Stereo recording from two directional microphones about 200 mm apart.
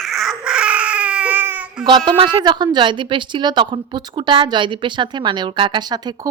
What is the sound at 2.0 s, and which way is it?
A woman's voice, 25° right (ahead or behind).